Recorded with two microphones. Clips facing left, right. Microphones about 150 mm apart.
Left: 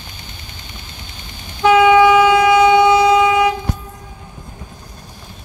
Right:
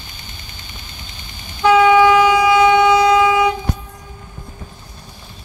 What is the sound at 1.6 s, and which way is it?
Vehicle, 15° left (ahead or behind).